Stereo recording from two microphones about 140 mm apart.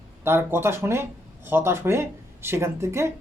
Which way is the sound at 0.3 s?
15° right (ahead or behind).